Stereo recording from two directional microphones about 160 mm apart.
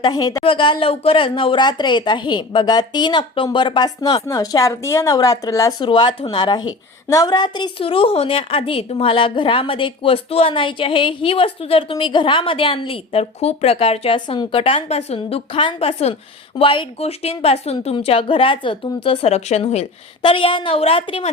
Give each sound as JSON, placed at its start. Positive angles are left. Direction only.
{"t": 0.0, "sound": "a woman's voice", "side_deg": 25}